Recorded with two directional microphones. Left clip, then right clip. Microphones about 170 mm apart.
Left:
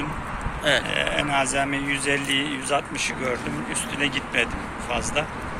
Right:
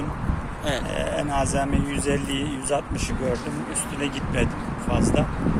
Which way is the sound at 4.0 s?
45° right (ahead or behind).